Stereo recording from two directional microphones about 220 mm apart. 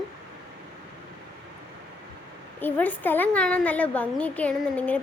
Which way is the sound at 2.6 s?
10° left (ahead or behind).